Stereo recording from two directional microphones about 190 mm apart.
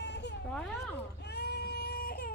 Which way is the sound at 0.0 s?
65° left (ahead or behind).